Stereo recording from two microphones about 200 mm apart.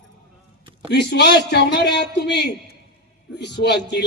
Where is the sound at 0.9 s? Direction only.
55° left (ahead or behind).